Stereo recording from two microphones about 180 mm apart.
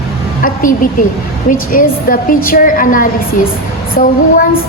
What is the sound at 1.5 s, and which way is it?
A woman's voice, 50° left (ahead or behind).